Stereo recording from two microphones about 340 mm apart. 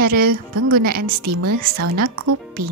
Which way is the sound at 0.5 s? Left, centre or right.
Right.